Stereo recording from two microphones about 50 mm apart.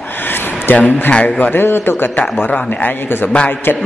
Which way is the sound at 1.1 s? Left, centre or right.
Left.